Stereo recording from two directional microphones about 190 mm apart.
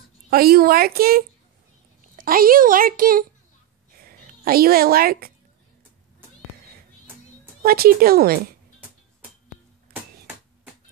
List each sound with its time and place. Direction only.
0.3 s a child's voice: 50° right (ahead or behind)
7.6 s a child's voice: 50° right (ahead or behind)